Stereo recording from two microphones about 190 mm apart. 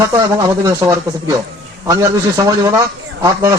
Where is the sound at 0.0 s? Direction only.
15° right (ahead or behind).